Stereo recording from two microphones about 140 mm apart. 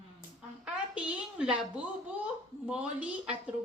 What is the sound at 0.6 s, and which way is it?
A woman's voice, 10° right (ahead or behind).